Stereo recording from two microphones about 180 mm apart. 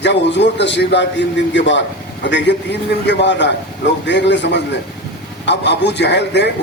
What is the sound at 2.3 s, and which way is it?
A man's voice, 75° left (ahead or behind).